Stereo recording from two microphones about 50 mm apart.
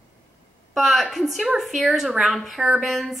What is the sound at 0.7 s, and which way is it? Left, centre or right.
A woman's voice, centre.